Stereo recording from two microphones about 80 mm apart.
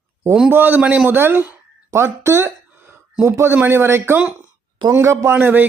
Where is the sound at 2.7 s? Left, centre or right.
Right.